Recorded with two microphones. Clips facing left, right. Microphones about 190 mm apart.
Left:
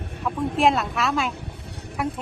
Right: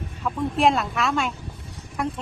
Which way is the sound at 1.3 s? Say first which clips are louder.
Left 2 dB; 65° left (ahead or behind).